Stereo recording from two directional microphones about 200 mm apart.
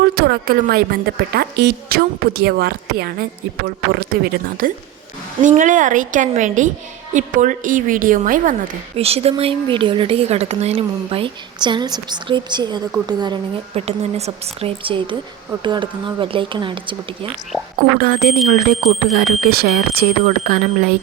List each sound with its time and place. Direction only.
0.0 s a woman's voice: 50° right (ahead or behind)
9.0 s a woman's voice: 30° right (ahead or behind)
17.9 s a woman's voice: 45° right (ahead or behind)
19.1 s speech: 50° right (ahead or behind)